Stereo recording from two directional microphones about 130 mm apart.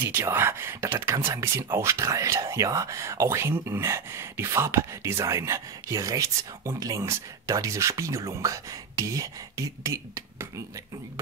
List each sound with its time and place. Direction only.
0.0 s speech: 20° right (ahead or behind)